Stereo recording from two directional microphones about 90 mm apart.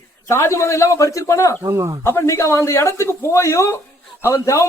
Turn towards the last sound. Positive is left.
turn(degrees=35)  # may be behind; listen again after turning